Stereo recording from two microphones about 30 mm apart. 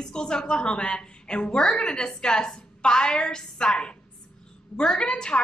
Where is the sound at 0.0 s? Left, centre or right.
Left.